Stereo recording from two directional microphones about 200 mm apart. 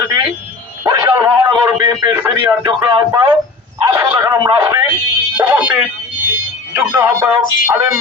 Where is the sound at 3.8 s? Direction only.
15° right (ahead or behind).